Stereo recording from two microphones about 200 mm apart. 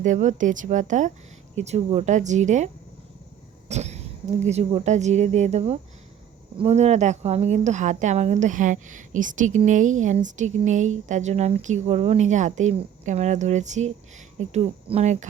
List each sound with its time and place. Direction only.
0.0 s a woman's voice: 35° right (ahead or behind)
3.7 s throat clearing: 35° right (ahead or behind)
4.4 s a woman's voice: 35° right (ahead or behind)